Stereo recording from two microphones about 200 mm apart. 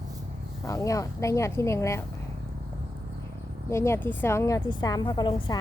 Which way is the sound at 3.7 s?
15° left (ahead or behind).